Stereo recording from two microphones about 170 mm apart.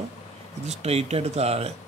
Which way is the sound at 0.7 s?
40° right (ahead or behind).